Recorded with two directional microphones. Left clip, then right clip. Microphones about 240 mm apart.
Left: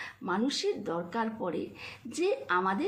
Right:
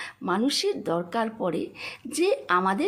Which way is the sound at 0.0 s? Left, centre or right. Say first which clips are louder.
Right 5 dB; right.